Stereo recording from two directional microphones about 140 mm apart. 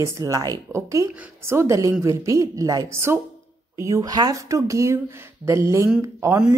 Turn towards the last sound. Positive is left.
turn(degrees=-20)  # may be behind; listen again after turning